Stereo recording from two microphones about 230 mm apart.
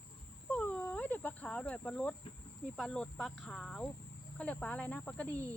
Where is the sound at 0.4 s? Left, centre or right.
Centre.